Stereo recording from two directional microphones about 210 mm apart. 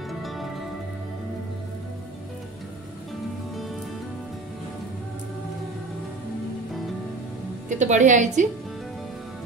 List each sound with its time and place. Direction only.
0.2 s music: centre (ahead or behind)
7.7 s a woman's voice: 35° right (ahead or behind)